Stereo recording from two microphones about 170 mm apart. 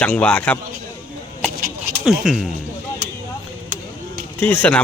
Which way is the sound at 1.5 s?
55° right (ahead or behind).